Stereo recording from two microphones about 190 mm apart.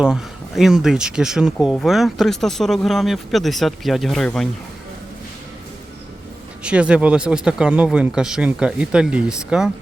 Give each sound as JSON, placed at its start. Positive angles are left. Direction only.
{"t": 0.0, "sound": "speech", "side_deg": -5}
{"t": 6.6, "sound": "speech", "side_deg": -5}